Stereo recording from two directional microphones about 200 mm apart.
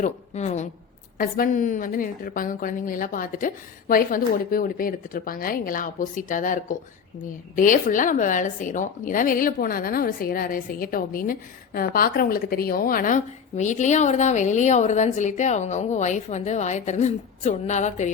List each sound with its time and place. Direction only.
0.0 s a woman's voice: 35° left (ahead or behind)